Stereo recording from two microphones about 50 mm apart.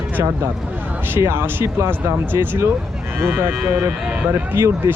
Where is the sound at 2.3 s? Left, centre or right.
Right.